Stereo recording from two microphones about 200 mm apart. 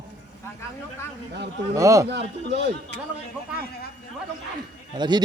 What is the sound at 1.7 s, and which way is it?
Speech, 15° right (ahead or behind).